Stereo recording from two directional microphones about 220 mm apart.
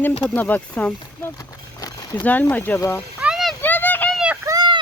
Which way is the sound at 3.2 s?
Centre (ahead or behind).